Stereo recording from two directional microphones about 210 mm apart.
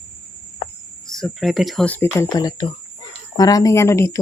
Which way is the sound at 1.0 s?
Centre (ahead or behind).